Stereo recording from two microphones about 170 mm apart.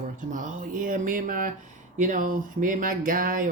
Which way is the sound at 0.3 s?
50° right (ahead or behind).